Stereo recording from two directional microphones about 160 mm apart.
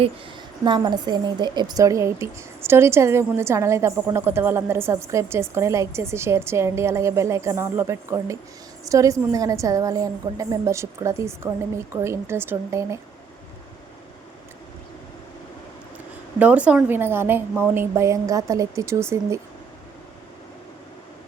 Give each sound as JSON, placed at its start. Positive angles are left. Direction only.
{"t": 0.6, "sound": "a woman's voice", "side_deg": -30}
{"t": 16.4, "sound": "a woman's voice", "side_deg": -10}